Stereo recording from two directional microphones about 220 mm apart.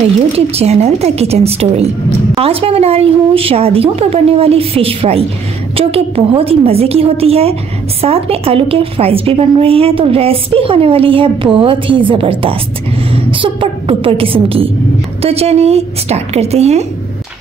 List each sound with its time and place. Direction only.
0.6 s a woman's voice: 30° right (ahead or behind)